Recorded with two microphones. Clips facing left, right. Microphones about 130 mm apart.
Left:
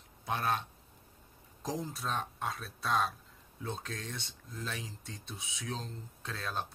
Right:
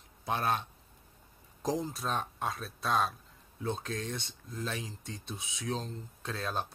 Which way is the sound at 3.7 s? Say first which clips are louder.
Right 5 dB; 5° right (ahead or behind).